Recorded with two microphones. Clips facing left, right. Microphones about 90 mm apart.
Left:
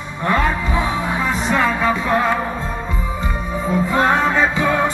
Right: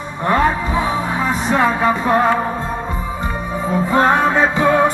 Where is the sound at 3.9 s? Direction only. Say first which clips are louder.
Right 3 dB; 40° right (ahead or behind).